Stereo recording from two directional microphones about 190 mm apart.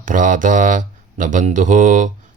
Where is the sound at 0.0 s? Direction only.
45° right (ahead or behind).